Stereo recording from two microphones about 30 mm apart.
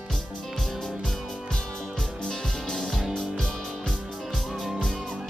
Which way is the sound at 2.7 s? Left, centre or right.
Centre.